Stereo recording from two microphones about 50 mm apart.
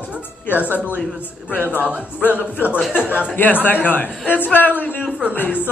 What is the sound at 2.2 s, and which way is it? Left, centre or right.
A man's voice, left.